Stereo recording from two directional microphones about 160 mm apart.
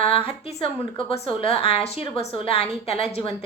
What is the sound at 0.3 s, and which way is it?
A woman's voice, 35° left (ahead or behind).